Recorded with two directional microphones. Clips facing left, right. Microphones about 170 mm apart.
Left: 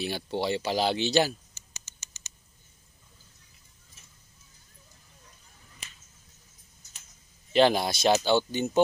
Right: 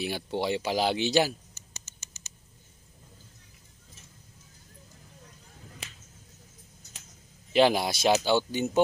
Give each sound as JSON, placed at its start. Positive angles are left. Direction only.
{"t": 0.0, "sound": "speech", "side_deg": -10}
{"t": 5.6, "sound": "finger snapping", "side_deg": -70}
{"t": 7.5, "sound": "speech", "side_deg": -10}